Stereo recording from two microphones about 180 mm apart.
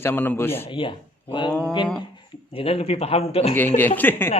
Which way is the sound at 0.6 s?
30° left (ahead or behind).